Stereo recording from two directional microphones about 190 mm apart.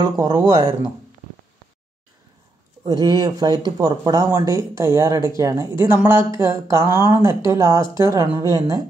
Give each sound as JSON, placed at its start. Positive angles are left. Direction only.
{"t": 0.0, "sound": "speech", "side_deg": -20}
{"t": 2.8, "sound": "speech", "side_deg": -20}